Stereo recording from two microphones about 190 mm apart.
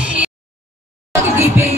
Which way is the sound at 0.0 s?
5° right (ahead or behind).